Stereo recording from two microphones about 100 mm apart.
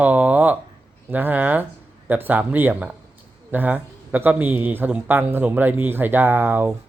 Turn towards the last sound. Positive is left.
turn(degrees=-20)  # may be behind; listen again after turning